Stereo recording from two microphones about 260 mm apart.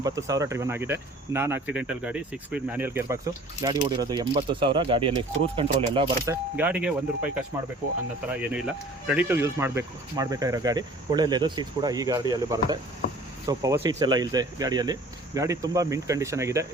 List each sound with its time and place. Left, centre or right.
0.0 s speech: centre
6.6 s speech: centre
9.0 s speech: centre